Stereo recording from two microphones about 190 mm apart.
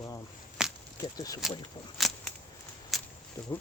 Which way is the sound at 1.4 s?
Centre (ahead or behind).